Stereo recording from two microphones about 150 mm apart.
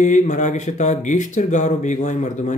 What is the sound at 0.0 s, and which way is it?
Speech, 55° left (ahead or behind).